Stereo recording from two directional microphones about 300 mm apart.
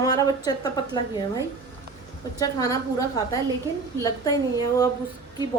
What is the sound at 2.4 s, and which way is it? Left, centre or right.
Speech, centre.